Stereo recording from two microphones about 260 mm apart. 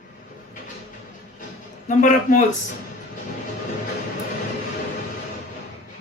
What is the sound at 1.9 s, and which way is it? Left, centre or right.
Speech, left.